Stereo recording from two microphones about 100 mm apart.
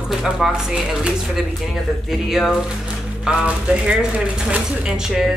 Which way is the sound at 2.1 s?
5° right (ahead or behind).